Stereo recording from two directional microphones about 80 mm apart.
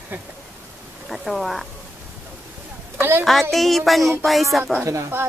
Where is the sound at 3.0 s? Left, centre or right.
Right.